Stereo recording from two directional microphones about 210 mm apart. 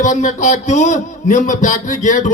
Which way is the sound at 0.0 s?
35° left (ahead or behind).